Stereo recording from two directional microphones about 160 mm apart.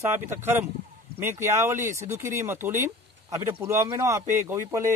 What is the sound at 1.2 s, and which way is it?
Speech, 15° right (ahead or behind).